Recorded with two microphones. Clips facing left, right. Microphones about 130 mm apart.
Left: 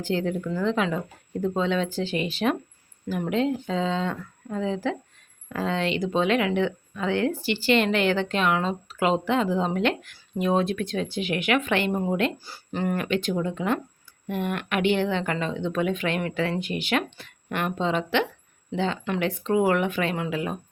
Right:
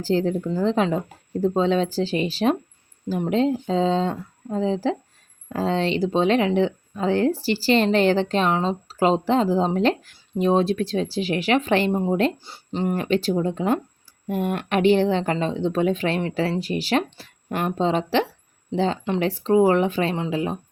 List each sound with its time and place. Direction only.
0.0 s speech: 35° right (ahead or behind)
11.9 s speech: 20° right (ahead or behind)
13.1 s speech: 35° right (ahead or behind)